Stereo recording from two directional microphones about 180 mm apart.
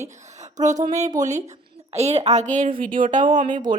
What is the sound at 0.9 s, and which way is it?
A woman's voice, 40° right (ahead or behind).